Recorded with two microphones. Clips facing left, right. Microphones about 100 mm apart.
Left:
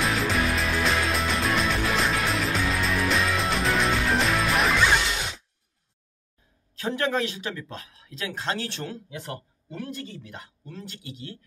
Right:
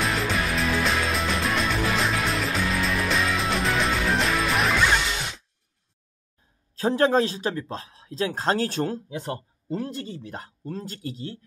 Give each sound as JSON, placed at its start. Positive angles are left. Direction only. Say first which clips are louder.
{"t": 0.0, "sound": "music", "louder": "left 1 dB", "side_deg": 0}
{"t": 6.7, "sound": "speech", "louder": "right 6 dB", "side_deg": -35}